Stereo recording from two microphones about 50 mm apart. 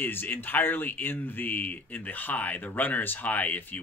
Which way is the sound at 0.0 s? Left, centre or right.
Left.